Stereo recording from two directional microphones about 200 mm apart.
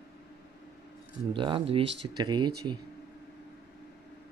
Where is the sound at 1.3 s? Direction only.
25° right (ahead or behind).